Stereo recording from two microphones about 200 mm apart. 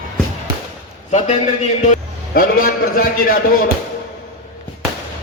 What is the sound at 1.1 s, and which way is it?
A man's voice, 35° left (ahead or behind).